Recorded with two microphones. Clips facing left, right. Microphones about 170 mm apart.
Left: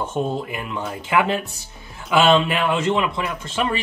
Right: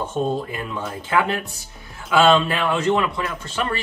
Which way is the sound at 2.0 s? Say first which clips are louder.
Even; 20° left (ahead or behind).